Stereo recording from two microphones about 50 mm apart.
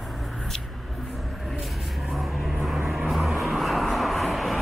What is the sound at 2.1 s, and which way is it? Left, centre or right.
Vehicle, centre.